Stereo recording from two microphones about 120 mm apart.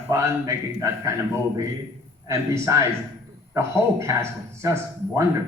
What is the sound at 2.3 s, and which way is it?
A man's voice, 25° right (ahead or behind).